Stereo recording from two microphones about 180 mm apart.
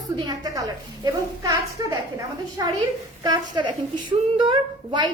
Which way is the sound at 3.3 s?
20° right (ahead or behind).